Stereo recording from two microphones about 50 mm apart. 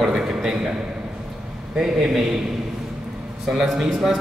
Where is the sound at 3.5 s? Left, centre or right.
Centre.